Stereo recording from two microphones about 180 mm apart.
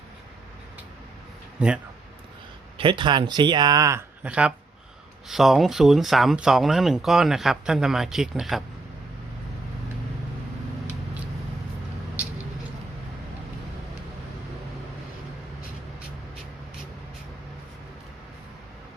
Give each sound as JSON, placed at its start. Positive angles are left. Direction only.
{"t": 1.5, "sound": "speech", "side_deg": -5}
{"t": 2.7, "sound": "speech", "side_deg": -25}